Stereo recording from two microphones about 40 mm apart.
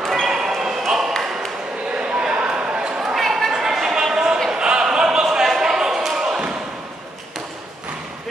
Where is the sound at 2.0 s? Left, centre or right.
Right.